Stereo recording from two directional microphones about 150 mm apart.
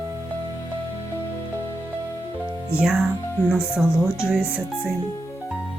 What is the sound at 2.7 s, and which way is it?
Speech, 15° left (ahead or behind).